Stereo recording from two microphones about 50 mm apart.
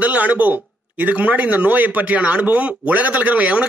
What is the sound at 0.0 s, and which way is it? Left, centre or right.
A man's voice, right.